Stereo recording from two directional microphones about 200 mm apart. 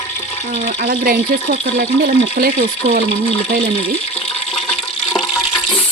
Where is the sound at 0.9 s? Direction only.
50° right (ahead or behind).